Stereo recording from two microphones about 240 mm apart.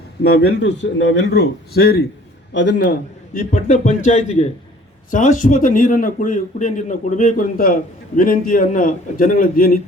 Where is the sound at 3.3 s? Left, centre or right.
Left.